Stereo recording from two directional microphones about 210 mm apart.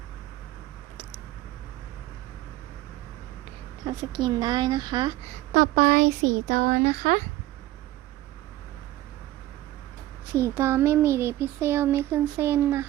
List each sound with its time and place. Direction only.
3.8 s speech: 20° right (ahead or behind)
5.5 s speech: 40° right (ahead or behind)
10.3 s a child's voice: 15° right (ahead or behind)